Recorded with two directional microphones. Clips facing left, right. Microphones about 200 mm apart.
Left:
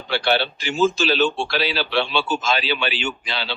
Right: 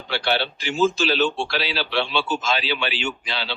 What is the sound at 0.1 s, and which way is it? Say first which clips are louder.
Speech: left 3 dB; 50° left (ahead or behind).